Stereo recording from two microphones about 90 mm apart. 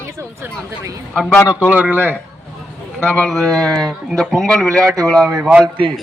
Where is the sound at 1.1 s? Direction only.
15° left (ahead or behind).